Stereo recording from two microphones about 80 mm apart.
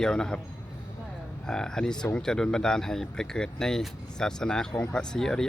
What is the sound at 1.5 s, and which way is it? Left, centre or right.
A man's voice, centre.